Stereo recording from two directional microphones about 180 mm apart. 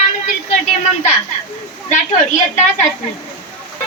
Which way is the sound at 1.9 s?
45° left (ahead or behind).